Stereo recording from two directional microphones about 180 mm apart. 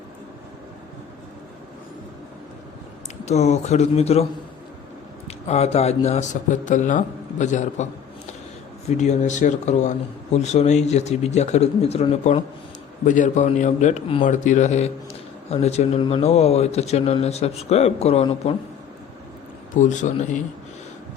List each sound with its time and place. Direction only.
3.2 s speech: 40° left (ahead or behind)
5.5 s speech: 35° left (ahead or behind)
9.0 s a man's voice: 40° left (ahead or behind)
19.7 s a man's voice: 45° left (ahead or behind)